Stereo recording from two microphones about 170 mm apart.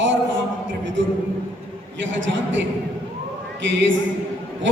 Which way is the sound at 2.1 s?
90° right.